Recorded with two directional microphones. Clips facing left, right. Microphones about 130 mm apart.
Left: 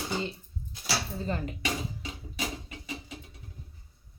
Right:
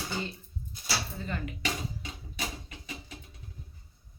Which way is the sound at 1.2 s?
35° left (ahead or behind).